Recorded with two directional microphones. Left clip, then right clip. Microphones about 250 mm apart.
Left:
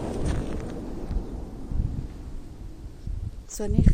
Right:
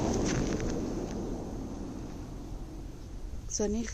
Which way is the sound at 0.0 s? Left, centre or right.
Right.